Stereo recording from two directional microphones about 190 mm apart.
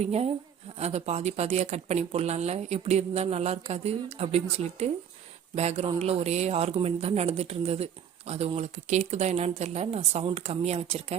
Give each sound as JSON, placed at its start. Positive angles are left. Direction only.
{"t": 0.0, "sound": "speech", "side_deg": -30}